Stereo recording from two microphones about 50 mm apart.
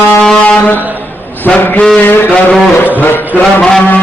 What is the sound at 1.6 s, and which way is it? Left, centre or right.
Music, left.